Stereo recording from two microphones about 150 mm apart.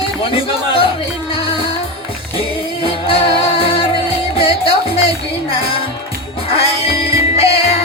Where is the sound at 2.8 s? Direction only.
35° left (ahead or behind).